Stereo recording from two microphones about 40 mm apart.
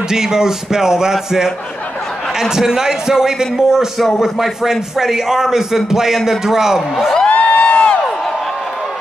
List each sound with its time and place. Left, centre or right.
0.1 s speech: centre
2.5 s speech: centre
7.2 s a sound: left